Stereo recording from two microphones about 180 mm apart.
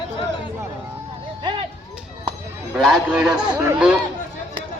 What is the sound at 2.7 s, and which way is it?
Speech, 5° right (ahead or behind).